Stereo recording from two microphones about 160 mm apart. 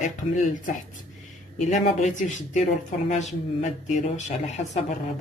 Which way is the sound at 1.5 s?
45° left (ahead or behind).